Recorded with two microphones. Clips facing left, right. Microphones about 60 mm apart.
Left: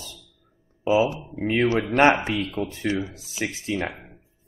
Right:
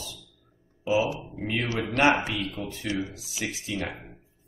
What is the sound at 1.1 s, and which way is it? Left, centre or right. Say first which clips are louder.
Speech: left 3 dB; centre.